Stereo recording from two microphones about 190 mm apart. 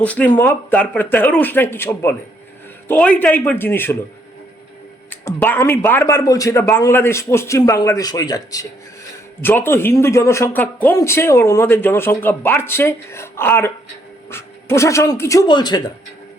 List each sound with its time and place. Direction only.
0.0 s a man's voice: 5° left (ahead or behind)
5.0 s a man's voice: 10° left (ahead or behind)